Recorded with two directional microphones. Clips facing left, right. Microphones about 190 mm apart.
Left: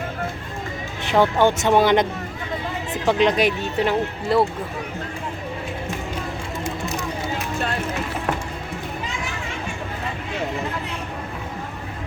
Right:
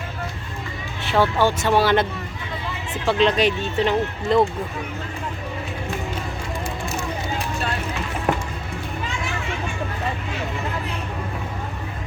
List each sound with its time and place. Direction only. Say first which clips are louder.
1.0 s speech: left 2 dB; 20° left (ahead or behind)
3.1 s speech: even; 15° left (ahead or behind)